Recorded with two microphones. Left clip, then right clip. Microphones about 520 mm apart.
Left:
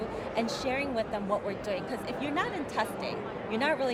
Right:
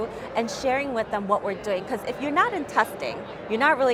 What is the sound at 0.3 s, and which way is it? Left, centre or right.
A woman's voice, right.